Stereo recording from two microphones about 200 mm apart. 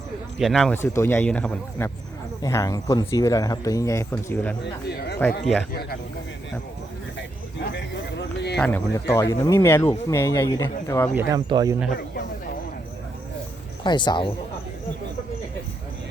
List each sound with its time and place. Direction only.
0.3 s speech: centre (ahead or behind)
4.6 s a man's voice: 55° left (ahead or behind)
7.2 s a sound: 60° left (ahead or behind)
8.5 s speech: 5° left (ahead or behind)
11.1 s speech: 15° right (ahead or behind)
13.8 s speech: 25° left (ahead or behind)